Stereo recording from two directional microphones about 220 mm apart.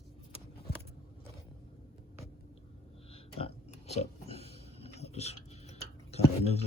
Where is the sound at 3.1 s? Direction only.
25° left (ahead or behind).